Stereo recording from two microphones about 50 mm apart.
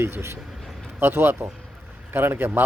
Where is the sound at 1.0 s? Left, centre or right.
Right.